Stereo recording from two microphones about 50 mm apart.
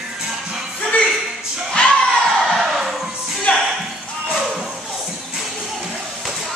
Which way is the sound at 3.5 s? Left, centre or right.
Left.